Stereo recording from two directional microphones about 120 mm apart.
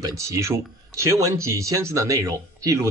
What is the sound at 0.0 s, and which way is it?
Speech, 25° right (ahead or behind).